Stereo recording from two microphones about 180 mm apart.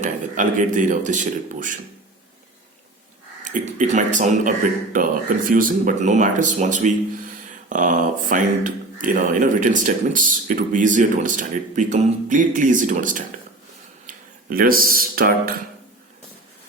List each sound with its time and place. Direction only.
0.0 s speech: 45° right (ahead or behind)
3.4 s speech: 45° right (ahead or behind)
14.1 s tick-tock: 45° right (ahead or behind)
14.5 s speech: 55° right (ahead or behind)